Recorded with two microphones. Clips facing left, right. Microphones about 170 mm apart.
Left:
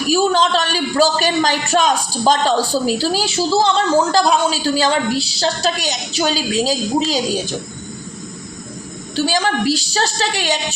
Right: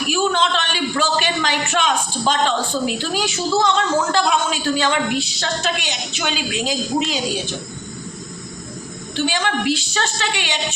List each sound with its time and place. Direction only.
0.1 s a man's voice: 40° left (ahead or behind)
9.1 s a man's voice: 40° left (ahead or behind)